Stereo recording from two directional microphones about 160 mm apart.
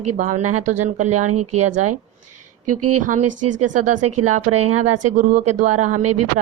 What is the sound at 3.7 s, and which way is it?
Speech, 55° right (ahead or behind).